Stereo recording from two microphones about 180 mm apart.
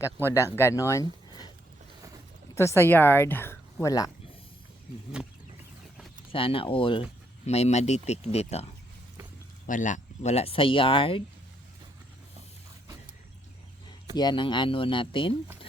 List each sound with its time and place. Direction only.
0.3 s speech: 15° left (ahead or behind)
2.6 s speech: 15° left (ahead or behind)
6.3 s speech: 30° left (ahead or behind)
14.2 s speech: 25° left (ahead or behind)